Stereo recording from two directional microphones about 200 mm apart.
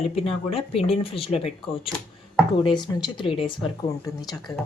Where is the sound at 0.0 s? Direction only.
30° left (ahead or behind).